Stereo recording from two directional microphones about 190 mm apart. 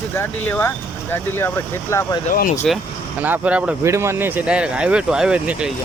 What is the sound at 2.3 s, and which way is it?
Speech, 45° left (ahead or behind).